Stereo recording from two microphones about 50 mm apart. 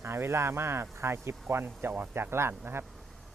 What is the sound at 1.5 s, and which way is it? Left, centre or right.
Speech, right.